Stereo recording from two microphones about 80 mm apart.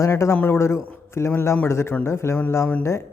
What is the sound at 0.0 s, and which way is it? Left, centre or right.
A man's voice, left.